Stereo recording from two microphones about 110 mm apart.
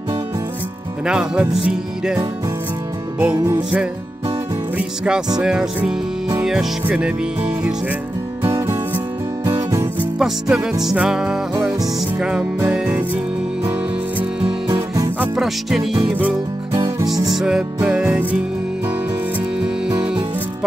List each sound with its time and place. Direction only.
1.0 s music: 5° right (ahead or behind)
3.3 s music: 40° right (ahead or behind)
4.7 s music: 10° right (ahead or behind)
8.5 s music: 25° right (ahead or behind)
10.1 s music: 5° right (ahead or behind)
15.3 s music: centre (ahead or behind)
16.7 s music: 35° right (ahead or behind)
17.3 s music: 5° right (ahead or behind)